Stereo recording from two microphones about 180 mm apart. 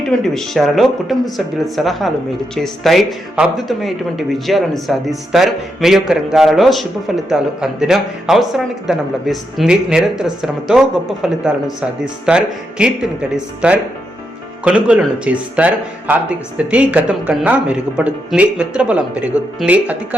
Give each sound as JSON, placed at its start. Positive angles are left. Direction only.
{"t": 0.0, "sound": "speech", "side_deg": 5}